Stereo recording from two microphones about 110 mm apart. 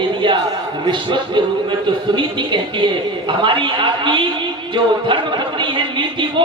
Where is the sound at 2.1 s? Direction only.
45° right (ahead or behind).